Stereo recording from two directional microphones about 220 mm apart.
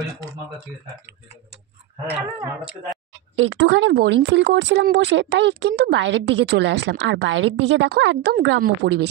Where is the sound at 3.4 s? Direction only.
55° right (ahead or behind).